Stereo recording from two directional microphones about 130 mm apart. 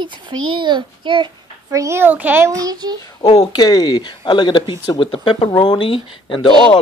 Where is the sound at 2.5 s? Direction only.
30° right (ahead or behind).